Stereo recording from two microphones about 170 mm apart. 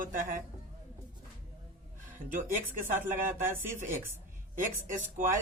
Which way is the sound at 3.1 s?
50° right (ahead or behind).